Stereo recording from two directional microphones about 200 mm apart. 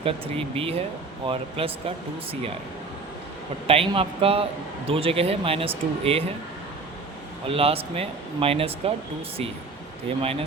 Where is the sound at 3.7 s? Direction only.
30° right (ahead or behind).